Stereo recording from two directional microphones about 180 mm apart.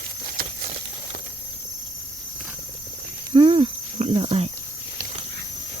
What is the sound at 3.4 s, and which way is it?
Cricket, 30° right (ahead or behind).